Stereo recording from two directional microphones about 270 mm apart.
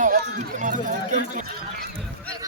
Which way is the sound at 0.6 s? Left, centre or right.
Right.